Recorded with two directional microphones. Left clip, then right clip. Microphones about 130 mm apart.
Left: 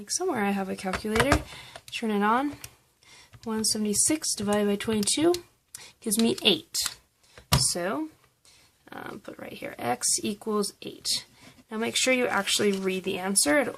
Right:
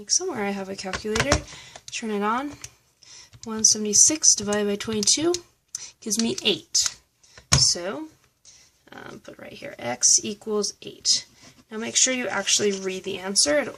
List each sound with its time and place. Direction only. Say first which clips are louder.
0.0 s speech: right 2 dB; 35° left (ahead or behind)
1.9 s speech: even; 20° left (ahead or behind)
3.5 s speech: right 8 dB; 15° left (ahead or behind)